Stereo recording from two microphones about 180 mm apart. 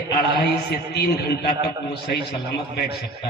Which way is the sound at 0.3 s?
60° left (ahead or behind).